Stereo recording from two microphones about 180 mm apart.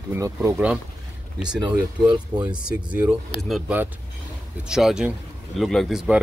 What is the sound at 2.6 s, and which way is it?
Speech, 5° right (ahead or behind).